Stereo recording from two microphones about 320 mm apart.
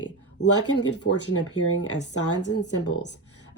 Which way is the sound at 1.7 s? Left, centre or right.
Left.